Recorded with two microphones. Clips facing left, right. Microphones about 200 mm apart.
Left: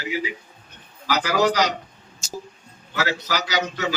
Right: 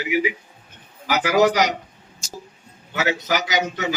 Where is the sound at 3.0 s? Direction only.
20° right (ahead or behind).